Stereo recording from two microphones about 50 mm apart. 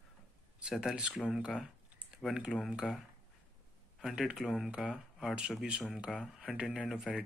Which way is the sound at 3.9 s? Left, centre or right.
Centre.